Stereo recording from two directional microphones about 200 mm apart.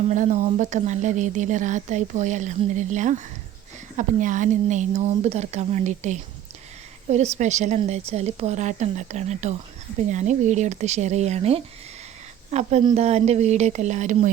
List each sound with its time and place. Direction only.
0.1 s speech: 35° right (ahead or behind)